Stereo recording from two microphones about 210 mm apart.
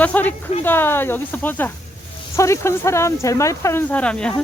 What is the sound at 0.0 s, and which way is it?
Speech, 10° left (ahead or behind).